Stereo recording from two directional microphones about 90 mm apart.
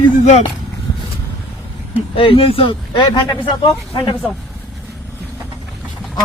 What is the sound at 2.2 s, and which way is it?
Speech, 90° left.